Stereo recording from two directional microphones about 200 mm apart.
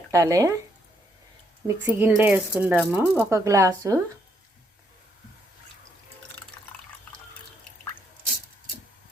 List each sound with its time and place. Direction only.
0.1 s speech: 15° right (ahead or behind)
1.6 s speech: 10° right (ahead or behind)